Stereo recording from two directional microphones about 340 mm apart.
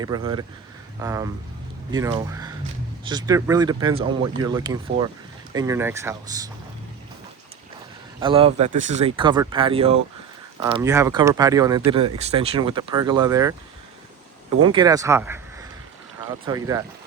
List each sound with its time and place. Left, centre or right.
0.0 s speech: centre
8.2 s speech: centre
14.6 s speech: centre
16.5 s speech: centre